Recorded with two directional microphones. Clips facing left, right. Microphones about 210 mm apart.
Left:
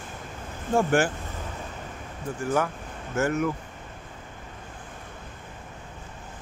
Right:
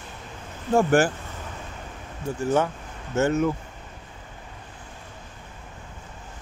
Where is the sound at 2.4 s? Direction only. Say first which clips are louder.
Right 3 dB; 25° right (ahead or behind).